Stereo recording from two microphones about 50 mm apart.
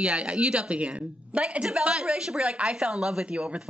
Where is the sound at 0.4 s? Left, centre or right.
Right.